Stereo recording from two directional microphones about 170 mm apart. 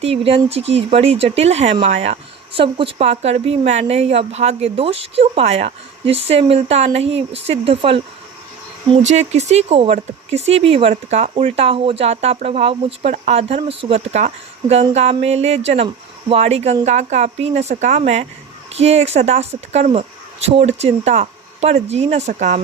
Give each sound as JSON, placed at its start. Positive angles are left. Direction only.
{"t": 0.0, "sound": "speech", "side_deg": -35}